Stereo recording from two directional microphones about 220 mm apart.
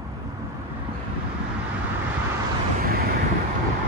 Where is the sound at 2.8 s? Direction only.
45° right (ahead or behind).